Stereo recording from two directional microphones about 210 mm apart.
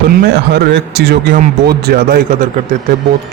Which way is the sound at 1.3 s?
45° right (ahead or behind).